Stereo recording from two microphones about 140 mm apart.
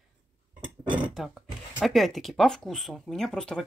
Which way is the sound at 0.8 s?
35° right (ahead or behind).